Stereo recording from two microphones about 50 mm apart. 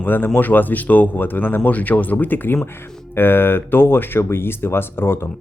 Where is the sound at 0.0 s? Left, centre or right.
Left.